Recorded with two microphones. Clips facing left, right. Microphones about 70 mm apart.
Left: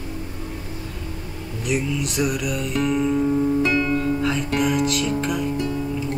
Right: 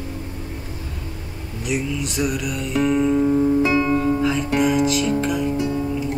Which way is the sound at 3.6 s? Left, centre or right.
Centre.